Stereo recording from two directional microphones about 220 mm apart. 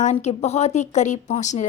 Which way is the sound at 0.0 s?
30° left (ahead or behind).